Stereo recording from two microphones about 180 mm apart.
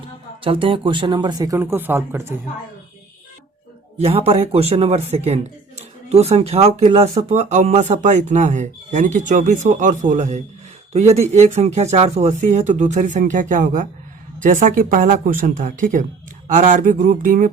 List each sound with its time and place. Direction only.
0.4 s speech: 30° right (ahead or behind); by 2.2 s 10° right (ahead or behind)
4.0 s speech: 35° right (ahead or behind)